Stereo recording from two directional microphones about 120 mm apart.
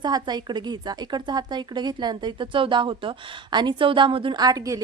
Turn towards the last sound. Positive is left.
turn(degrees=-30)  # may be behind; listen again after turning